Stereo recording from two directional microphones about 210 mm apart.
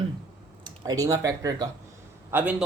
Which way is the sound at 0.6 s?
15° right (ahead or behind).